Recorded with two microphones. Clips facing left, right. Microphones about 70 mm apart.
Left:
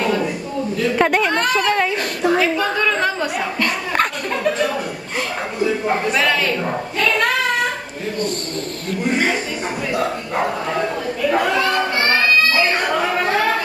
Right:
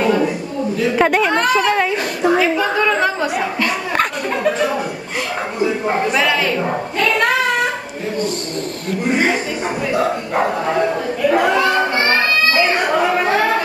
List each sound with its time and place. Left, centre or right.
0.0 s a sound: centre
5.6 s a woman's voice: centre
9.0 s a woman's voice: centre
11.8 s music: centre
12.8 s chatter: centre